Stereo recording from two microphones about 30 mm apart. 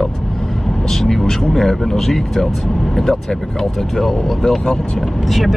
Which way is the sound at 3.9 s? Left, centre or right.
Centre.